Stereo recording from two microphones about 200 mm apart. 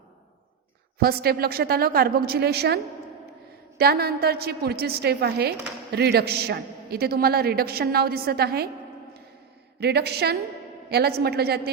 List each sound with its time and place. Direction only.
1.0 s a woman's voice: 50° right (ahead or behind)
9.8 s a woman's voice: 55° right (ahead or behind)